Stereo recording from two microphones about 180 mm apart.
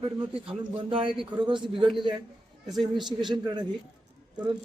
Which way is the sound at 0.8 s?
30° right (ahead or behind).